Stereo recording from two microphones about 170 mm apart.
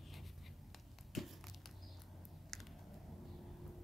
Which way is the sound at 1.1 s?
Centre (ahead or behind).